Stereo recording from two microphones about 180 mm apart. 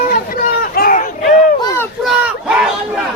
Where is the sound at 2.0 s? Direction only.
5° right (ahead or behind).